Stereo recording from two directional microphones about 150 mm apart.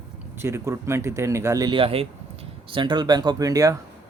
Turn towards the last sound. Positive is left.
turn(degrees=-25)  # may be behind; listen again after turning